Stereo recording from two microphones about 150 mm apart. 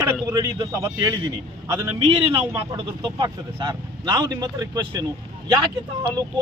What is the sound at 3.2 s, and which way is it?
Speech, 30° right (ahead or behind).